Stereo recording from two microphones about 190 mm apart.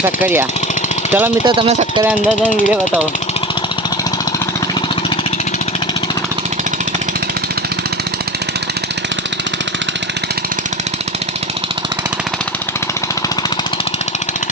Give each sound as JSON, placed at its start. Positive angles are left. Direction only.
{"t": 0.0, "sound": "speech", "side_deg": -10}
{"t": 1.5, "sound": "speech", "side_deg": -30}
{"t": 2.6, "sound": "speech", "side_deg": -10}